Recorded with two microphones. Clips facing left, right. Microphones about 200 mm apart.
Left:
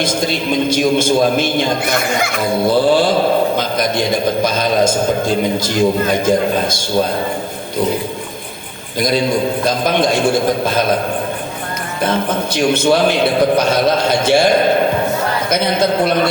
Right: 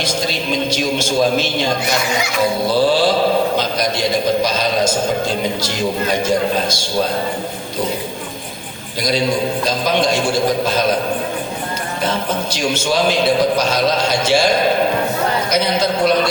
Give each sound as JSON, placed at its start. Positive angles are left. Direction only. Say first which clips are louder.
{"t": 0.0, "sound": "a man's voice", "louder": "left 3 dB", "side_deg": 50}
{"t": 6.2, "sound": "a man's voice", "louder": "left 2 dB", "side_deg": 50}
{"t": 9.0, "sound": "a man's voice", "louder": "left 2 dB", "side_deg": 50}
{"t": 12.5, "sound": "a man's voice", "louder": "left 6 dB", "side_deg": 55}